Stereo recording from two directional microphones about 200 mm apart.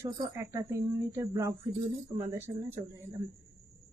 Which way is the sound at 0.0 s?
15° right (ahead or behind).